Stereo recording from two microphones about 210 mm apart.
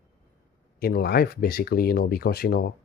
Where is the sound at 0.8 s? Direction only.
45° left (ahead or behind).